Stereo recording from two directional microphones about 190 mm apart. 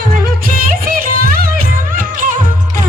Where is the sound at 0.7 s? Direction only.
50° right (ahead or behind).